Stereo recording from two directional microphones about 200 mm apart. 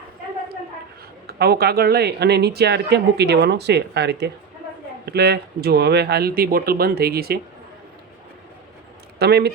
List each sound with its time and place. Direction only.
1.3 s speech: 50° right (ahead or behind)
9.1 s speech: 55° right (ahead or behind)